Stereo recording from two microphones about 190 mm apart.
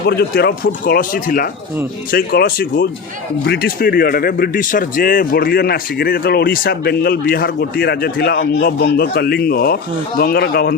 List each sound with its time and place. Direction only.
0.0 s speech: 55° left (ahead or behind)